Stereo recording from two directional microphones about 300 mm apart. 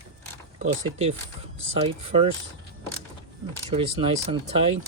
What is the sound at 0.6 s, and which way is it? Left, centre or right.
Speech, centre.